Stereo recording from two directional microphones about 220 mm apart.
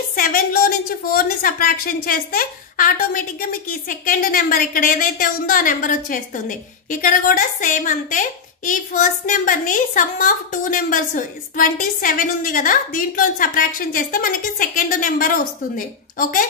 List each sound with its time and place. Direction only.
0.1 s a woman's voice: 40° left (ahead or behind)